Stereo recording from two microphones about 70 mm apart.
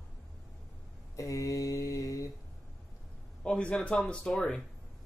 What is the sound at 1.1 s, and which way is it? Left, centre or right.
Mantra, left.